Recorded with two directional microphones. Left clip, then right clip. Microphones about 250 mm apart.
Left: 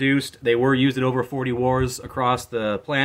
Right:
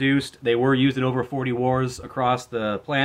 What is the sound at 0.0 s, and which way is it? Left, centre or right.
Speech, centre.